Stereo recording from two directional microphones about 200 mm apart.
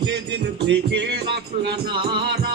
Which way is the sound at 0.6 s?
60° right (ahead or behind).